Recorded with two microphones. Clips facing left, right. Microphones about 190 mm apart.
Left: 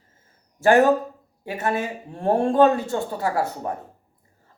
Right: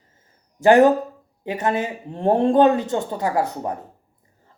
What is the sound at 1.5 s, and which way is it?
Speech, 20° right (ahead or behind).